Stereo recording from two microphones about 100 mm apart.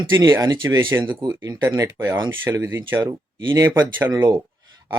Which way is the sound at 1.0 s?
40° right (ahead or behind).